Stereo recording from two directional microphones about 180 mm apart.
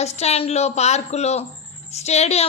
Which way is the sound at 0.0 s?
35° left (ahead or behind).